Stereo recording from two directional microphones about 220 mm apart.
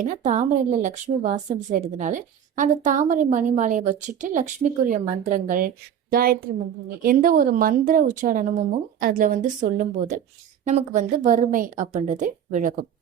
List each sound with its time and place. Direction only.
0.0 s a woman's voice: 35° right (ahead or behind)